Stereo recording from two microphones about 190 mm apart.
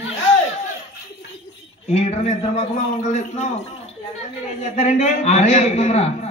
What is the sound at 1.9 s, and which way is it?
Speech, 35° left (ahead or behind).